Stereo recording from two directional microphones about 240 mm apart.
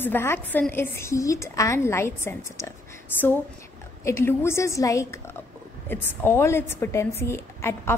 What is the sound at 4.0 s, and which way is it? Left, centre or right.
A woman's voice, centre.